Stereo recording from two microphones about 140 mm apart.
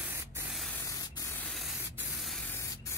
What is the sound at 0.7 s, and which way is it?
Spray, 20° left (ahead or behind).